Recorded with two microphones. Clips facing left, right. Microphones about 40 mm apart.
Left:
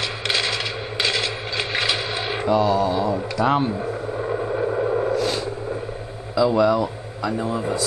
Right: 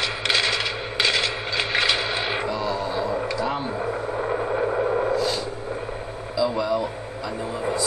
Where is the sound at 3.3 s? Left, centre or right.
Left.